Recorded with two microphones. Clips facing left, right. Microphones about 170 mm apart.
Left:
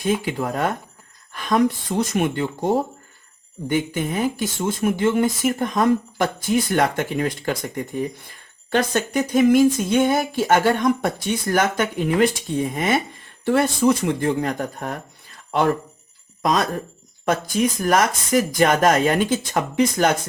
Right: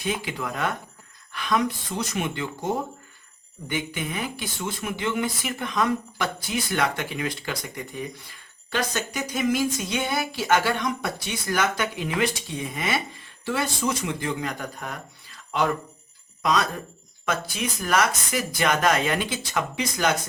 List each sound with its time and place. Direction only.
0.0 s speech: 45° left (ahead or behind)